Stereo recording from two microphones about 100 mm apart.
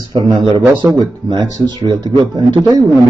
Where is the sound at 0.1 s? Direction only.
45° right (ahead or behind).